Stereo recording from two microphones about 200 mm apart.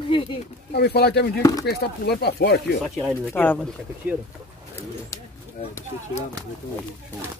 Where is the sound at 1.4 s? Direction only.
15° left (ahead or behind).